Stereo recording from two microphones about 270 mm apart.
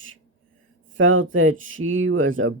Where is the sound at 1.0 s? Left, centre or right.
Right.